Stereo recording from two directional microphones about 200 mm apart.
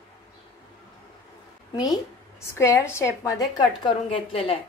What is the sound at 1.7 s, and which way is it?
A woman's voice, 20° left (ahead or behind).